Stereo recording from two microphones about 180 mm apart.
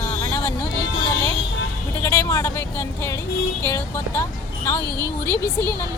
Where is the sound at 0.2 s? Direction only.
15° left (ahead or behind).